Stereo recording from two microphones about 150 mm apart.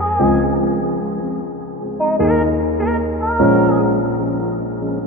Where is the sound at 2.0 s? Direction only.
Centre (ahead or behind).